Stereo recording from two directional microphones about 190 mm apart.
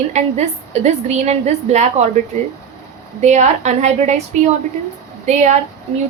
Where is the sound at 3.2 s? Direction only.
40° right (ahead or behind).